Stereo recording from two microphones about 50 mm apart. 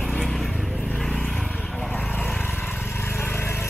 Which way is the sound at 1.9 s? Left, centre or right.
Left.